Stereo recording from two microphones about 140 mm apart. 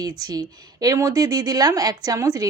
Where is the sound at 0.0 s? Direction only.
25° right (ahead or behind).